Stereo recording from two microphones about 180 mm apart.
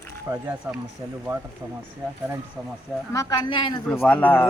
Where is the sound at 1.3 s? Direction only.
20° right (ahead or behind).